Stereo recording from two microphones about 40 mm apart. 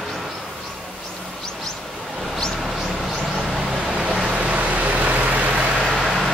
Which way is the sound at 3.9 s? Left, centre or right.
Right.